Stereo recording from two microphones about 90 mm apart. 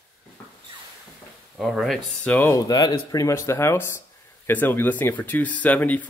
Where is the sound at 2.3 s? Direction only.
25° left (ahead or behind).